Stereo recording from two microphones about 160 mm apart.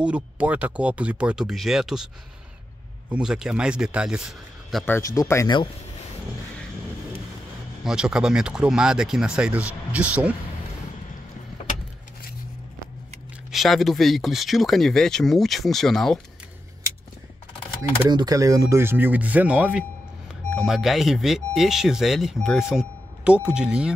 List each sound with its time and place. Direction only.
0.0 s speech: 10° right (ahead or behind)
3.1 s speech: 5° right (ahead or behind)
4.8 s a man's voice: 15° left (ahead or behind)
7.8 s speech: 5° right (ahead or behind)
13.5 s speech: centre (ahead or behind)
18.1 s speech: 25° right (ahead or behind); by 23.9 s 5° right (ahead or behind)